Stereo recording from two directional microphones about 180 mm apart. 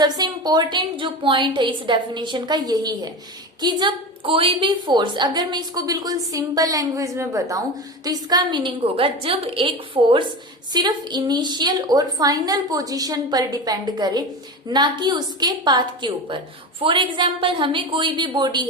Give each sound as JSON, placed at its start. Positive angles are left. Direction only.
{"t": 0.0, "sound": "a woman's voice", "side_deg": -20}